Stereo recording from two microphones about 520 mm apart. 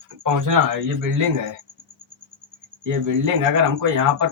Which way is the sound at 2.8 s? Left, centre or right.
Right.